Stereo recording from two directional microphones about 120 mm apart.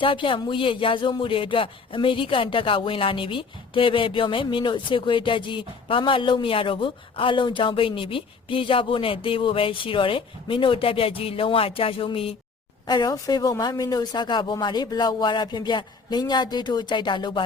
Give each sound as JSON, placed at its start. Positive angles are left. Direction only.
{"t": 0.0, "sound": "speech", "side_deg": 45}
{"t": 12.9, "sound": "speech", "side_deg": 35}